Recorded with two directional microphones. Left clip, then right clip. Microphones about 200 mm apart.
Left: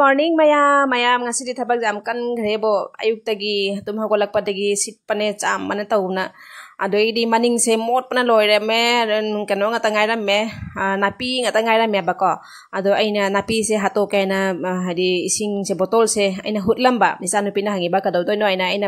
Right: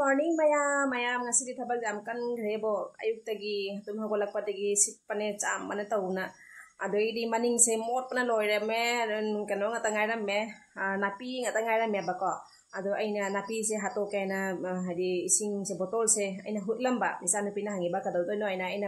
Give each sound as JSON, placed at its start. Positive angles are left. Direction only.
{"t": 0.0, "sound": "a woman's voice", "side_deg": 50}